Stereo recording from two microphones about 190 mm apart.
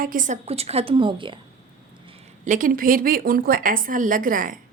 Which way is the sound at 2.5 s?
45° right (ahead or behind).